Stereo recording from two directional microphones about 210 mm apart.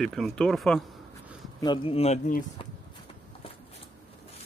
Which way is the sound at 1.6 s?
25° left (ahead or behind).